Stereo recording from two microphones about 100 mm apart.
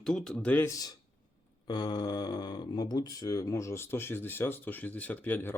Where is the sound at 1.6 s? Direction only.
45° left (ahead or behind).